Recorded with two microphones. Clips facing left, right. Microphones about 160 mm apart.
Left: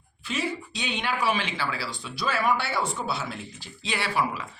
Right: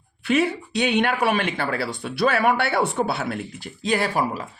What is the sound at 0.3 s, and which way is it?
Speech, 60° right (ahead or behind).